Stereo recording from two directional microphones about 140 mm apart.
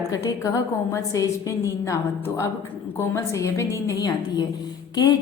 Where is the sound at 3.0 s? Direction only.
20° left (ahead or behind).